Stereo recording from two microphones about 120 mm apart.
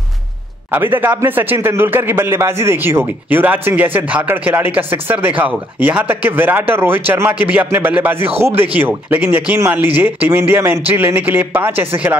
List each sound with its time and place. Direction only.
0.7 s a man's voice: 15° right (ahead or behind)